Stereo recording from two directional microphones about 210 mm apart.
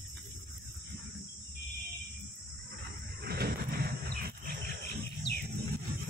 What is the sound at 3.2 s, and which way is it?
Wild animals, 50° right (ahead or behind).